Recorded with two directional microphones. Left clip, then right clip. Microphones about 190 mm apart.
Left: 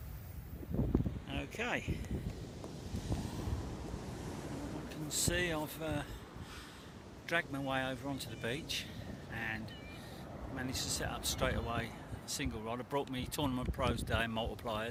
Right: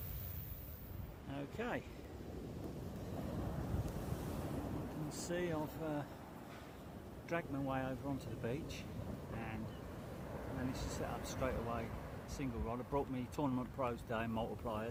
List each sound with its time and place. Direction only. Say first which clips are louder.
1.3 s a sound: left 4 dB; 5° left (ahead or behind)
5.0 s speech: left 7 dB; 5° left (ahead or behind)
7.3 s speech: left 5 dB; 5° left (ahead or behind)
9.3 s vehicle: left 9 dB; 5° left (ahead or behind)
10.7 s speech: left 7 dB; centre (ahead or behind)